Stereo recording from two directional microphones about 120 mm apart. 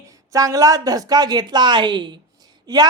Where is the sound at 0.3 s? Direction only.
30° right (ahead or behind).